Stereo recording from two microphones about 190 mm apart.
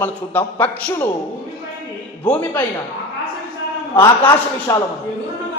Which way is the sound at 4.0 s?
15° left (ahead or behind).